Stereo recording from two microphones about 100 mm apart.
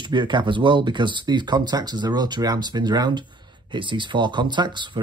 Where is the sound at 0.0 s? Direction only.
50° right (ahead or behind).